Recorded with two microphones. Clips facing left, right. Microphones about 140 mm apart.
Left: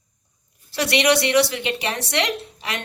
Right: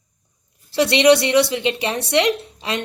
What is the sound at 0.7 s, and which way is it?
A woman's voice, 25° right (ahead or behind).